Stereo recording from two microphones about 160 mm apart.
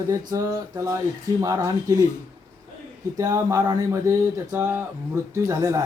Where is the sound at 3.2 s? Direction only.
20° right (ahead or behind).